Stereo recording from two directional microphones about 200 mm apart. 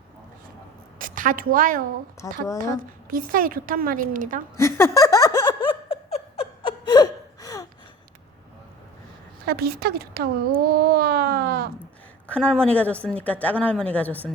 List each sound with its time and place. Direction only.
0.9 s a woman's voice: 40° right (ahead or behind)
2.2 s speech: 15° left (ahead or behind)
3.1 s a child's voice: 45° right (ahead or behind)
4.5 s a sound: 15° left (ahead or behind)
9.5 s a child's voice: 50° right (ahead or behind)
12.3 s speech: 5° left (ahead or behind)